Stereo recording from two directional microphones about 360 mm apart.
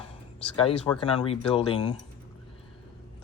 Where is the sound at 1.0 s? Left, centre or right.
Centre.